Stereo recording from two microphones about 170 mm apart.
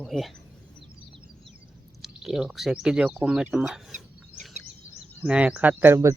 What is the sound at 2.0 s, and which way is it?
Speech, 5° right (ahead or behind).